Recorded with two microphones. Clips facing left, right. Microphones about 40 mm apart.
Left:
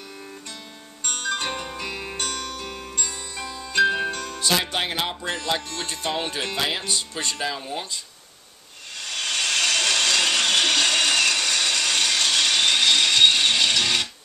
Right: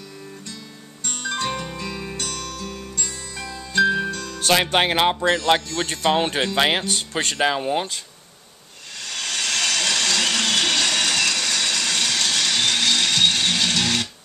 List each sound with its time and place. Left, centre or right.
1.0 s music: left
4.4 s speech: right
5.2 s speech: right
7.5 s speech: right
9.0 s a sound: left